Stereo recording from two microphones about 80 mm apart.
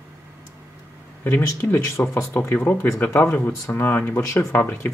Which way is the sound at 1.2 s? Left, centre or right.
Left.